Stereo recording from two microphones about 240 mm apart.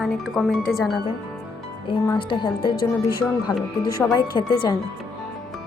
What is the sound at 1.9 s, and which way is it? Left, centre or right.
A woman's voice, left.